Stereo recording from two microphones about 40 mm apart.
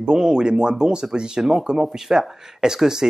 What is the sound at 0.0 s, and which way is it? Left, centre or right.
Speech, centre.